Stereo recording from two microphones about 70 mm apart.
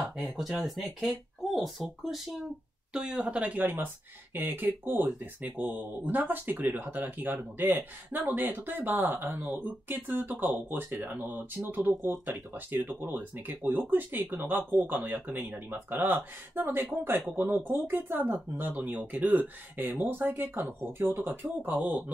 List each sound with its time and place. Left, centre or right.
0.2 s speech: centre; by 22.0 s right